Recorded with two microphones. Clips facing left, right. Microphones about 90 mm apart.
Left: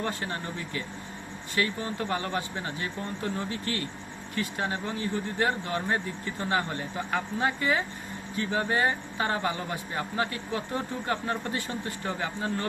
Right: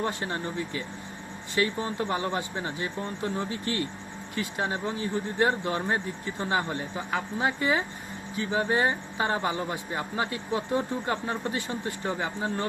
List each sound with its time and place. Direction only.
0.0 s speech: 20° right (ahead or behind)